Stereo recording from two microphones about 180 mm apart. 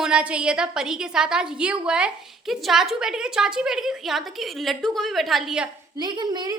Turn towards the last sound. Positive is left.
turn(degrees=-25)  # may be behind; listen again after turning